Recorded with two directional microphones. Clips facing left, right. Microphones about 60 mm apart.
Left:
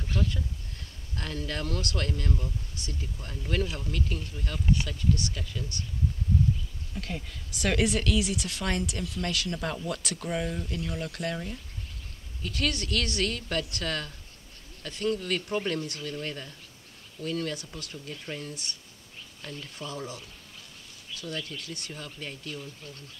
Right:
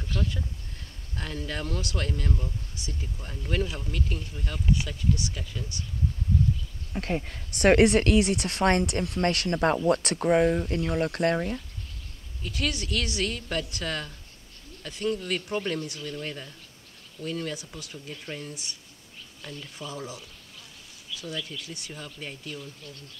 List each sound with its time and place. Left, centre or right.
1.1 s speech: centre
2.7 s a sound: centre
3.0 s speech: centre
6.9 s speech: right
7.5 s speech: right
10.8 s speech: right
12.4 s speech: centre
17.9 s speech: centre
18.5 s speech: centre
19.4 s speech: centre
19.9 s speech: centre